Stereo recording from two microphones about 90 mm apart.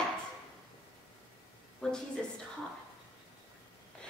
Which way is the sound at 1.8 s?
10° left (ahead or behind).